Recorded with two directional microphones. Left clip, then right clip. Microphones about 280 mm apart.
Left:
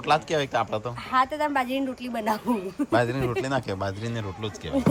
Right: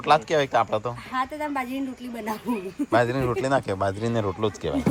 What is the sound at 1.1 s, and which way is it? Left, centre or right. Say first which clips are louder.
A woman's voice: left 5 dB; left.